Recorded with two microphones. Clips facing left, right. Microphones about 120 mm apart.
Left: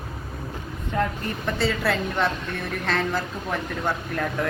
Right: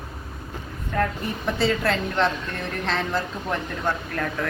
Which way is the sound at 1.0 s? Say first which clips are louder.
Right 1 dB; 15° left (ahead or behind).